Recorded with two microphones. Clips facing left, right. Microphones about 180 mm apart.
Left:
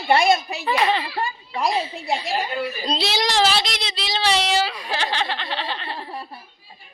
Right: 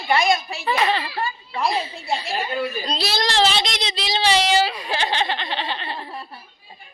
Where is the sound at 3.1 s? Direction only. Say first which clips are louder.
Right 1 dB; 10° left (ahead or behind).